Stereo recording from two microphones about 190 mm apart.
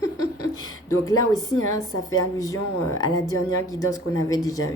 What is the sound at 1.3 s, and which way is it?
A woman's voice, 20° left (ahead or behind).